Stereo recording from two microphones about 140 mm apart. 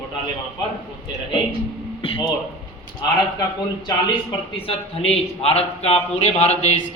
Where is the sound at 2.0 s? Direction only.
40° left (ahead or behind).